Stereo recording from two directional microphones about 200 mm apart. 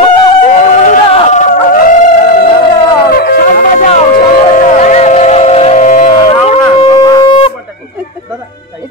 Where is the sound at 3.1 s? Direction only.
50° left (ahead or behind).